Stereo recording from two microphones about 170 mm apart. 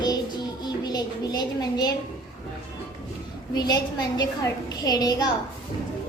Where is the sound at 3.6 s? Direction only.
25° left (ahead or behind).